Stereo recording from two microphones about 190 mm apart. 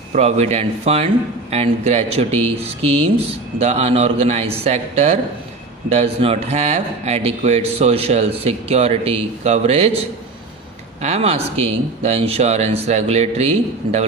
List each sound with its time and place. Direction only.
0.1 s a man's voice: 35° right (ahead or behind)
11.0 s a man's voice: 30° right (ahead or behind)